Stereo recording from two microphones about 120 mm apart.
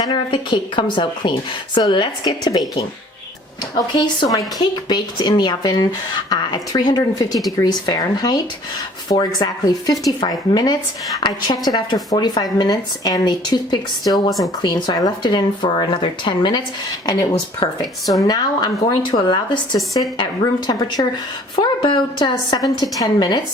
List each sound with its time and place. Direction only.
0.0 s a woman's voice: 40° left (ahead or behind)
14.3 s speech: centre (ahead or behind)
14.6 s a woman's voice: 35° left (ahead or behind)